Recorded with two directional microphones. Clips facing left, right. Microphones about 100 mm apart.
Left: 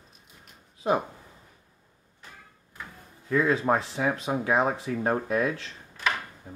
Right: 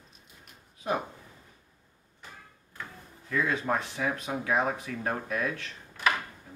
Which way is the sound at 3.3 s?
35° left (ahead or behind).